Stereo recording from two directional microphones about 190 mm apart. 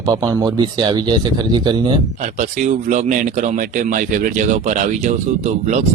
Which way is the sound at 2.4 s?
40° right (ahead or behind).